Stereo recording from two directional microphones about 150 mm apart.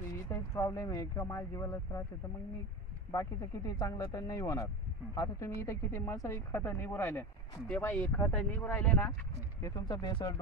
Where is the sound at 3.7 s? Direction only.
25° left (ahead or behind).